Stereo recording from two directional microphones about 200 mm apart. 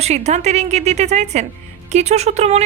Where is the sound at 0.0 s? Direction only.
35° right (ahead or behind).